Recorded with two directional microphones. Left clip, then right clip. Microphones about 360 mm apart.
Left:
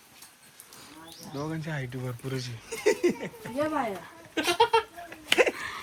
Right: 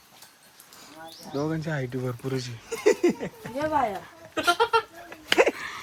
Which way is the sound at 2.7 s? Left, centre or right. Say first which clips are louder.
Right 3 dB; right.